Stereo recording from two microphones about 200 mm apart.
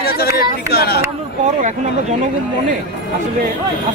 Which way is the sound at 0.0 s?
50° left (ahead or behind).